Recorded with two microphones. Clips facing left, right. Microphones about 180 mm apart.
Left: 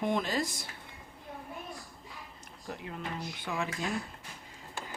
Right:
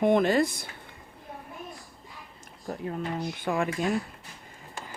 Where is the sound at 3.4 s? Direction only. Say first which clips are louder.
Right 7 dB; 55° right (ahead or behind).